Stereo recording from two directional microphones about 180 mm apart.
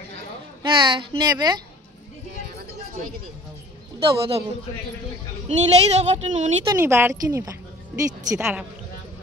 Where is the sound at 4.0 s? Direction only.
30° right (ahead or behind).